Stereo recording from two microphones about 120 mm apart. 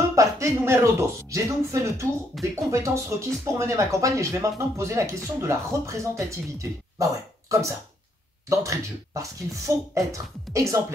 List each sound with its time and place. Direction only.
0.1 s speech: 25° right (ahead or behind)
2.3 s speech: centre (ahead or behind)
2.7 s speech: 25° right (ahead or behind)